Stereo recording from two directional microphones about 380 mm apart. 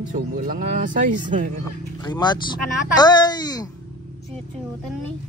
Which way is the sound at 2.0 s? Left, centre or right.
Centre.